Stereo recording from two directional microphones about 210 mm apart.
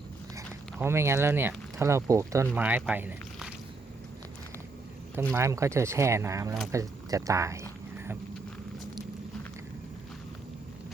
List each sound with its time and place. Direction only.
0.3 s speech: 10° right (ahead or behind)
5.3 s speech: 15° right (ahead or behind)